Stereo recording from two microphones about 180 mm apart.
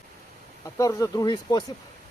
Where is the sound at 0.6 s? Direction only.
20° left (ahead or behind).